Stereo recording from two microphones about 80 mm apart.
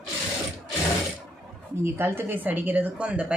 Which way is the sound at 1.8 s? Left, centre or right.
Right.